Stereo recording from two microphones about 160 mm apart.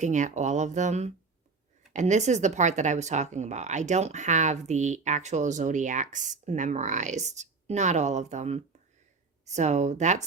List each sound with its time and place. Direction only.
0.0 s speech: 50° right (ahead or behind)